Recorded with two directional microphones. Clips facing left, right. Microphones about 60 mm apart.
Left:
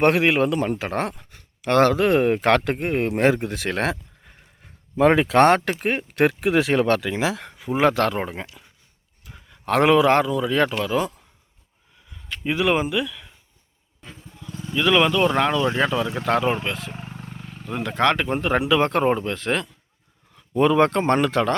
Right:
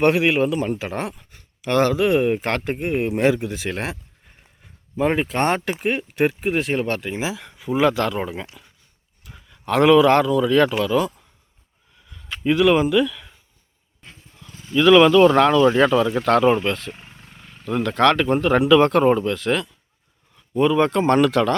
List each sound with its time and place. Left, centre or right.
0.0 s speech: left
2.8 s speech: left
3.6 s speech: left
5.8 s speech: left
6.1 s speech: left
7.4 s speech: left
9.5 s a sound: left
9.8 s speech: left
12.4 s speech: centre
14.8 s speech: centre; by 19.7 s left
20.5 s speech: left
20.9 s speech: left
21.2 s speech: left